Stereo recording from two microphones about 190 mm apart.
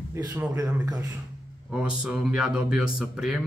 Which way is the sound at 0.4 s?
10° right (ahead or behind).